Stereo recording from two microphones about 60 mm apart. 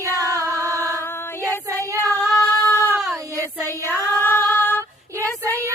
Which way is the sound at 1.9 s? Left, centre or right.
Right.